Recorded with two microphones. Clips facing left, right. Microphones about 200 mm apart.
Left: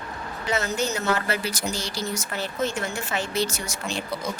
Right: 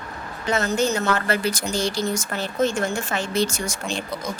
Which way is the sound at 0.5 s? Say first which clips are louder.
Right 4 dB; 50° right (ahead or behind).